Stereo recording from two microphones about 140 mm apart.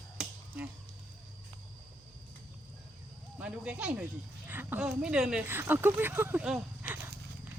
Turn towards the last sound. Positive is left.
turn(degrees=-10)  # may be behind; listen again after turning